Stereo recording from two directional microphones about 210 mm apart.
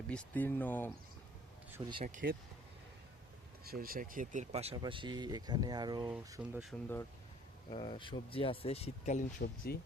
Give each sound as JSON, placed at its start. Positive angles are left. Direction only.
{"t": 0.1, "sound": "speech", "side_deg": 5}
{"t": 1.8, "sound": "speech", "side_deg": -15}
{"t": 2.2, "sound": "speech", "side_deg": -50}
{"t": 3.6, "sound": "speech", "side_deg": -45}
{"t": 6.3, "sound": "speech", "side_deg": -5}
{"t": 7.7, "sound": "speech", "side_deg": 25}
{"t": 9.7, "sound": "speech", "side_deg": 50}